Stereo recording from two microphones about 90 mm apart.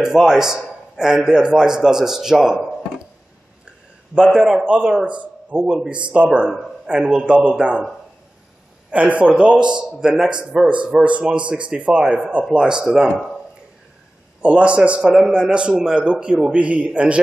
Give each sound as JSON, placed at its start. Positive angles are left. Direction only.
{"t": 0.0, "sound": "a man's voice", "side_deg": -5}
{"t": 4.1, "sound": "a man's voice", "side_deg": -5}
{"t": 8.9, "sound": "a man's voice", "side_deg": -15}
{"t": 14.4, "sound": "a man's voice", "side_deg": -15}